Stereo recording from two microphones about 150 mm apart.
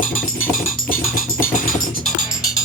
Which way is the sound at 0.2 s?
65° left (ahead or behind).